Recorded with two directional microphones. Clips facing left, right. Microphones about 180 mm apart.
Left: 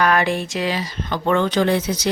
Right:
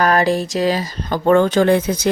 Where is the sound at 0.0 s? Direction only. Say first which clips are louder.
Right 3 dB; 35° right (ahead or behind).